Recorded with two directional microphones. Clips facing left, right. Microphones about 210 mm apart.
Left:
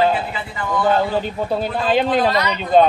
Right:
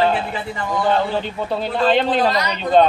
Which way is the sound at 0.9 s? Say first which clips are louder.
Left 2 dB; 10° left (ahead or behind).